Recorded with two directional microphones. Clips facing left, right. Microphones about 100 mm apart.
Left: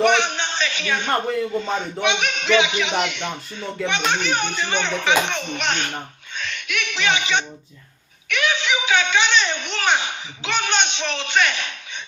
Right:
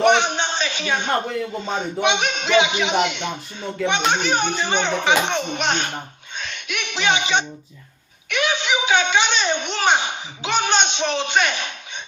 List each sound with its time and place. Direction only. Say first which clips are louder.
0.0 s a man's voice: right 2 dB; 20° right (ahead or behind)